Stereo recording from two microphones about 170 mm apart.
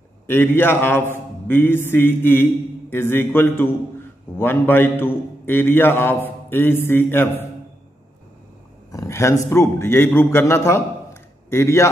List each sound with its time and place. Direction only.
0.3 s a man's voice: 10° left (ahead or behind)
8.9 s a man's voice: 15° left (ahead or behind)